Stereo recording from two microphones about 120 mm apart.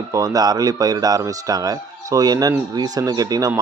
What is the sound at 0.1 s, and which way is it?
Speech, 30° right (ahead or behind).